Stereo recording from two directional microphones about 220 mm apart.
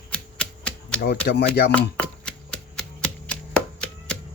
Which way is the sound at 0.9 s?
50° left (ahead or behind).